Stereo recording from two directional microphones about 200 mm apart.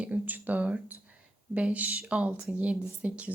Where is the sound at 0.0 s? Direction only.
10° right (ahead or behind).